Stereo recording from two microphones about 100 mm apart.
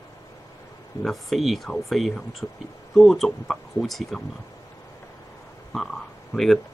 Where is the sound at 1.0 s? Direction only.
Centre (ahead or behind).